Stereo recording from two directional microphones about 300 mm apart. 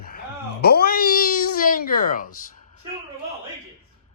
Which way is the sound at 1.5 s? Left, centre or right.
Left.